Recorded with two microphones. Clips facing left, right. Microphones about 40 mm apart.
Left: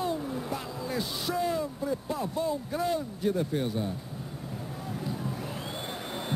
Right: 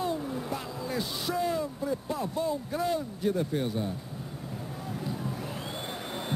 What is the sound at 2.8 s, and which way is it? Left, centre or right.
Speech, centre.